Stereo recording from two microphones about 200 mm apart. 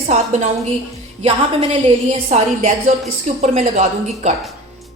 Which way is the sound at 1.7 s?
30° right (ahead or behind).